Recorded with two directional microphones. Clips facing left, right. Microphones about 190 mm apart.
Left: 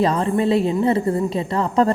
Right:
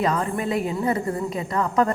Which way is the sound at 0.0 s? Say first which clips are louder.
Left 5 dB; 30° left (ahead or behind).